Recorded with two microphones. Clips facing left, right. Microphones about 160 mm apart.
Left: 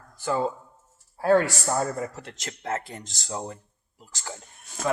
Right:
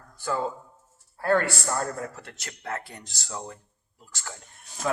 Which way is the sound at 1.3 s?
10° left (ahead or behind).